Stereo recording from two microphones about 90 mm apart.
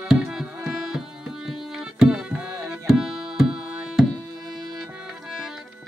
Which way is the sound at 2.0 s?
10° right (ahead or behind).